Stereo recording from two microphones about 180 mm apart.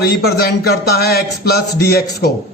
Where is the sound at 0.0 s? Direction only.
60° left (ahead or behind).